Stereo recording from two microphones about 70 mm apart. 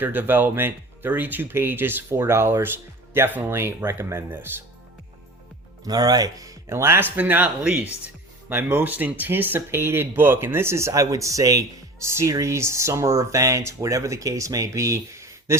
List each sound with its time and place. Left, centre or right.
0.0 s speech: right
5.8 s speech: right
6.7 s speech: right